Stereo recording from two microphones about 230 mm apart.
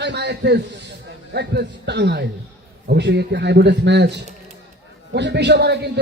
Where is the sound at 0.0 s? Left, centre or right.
Right.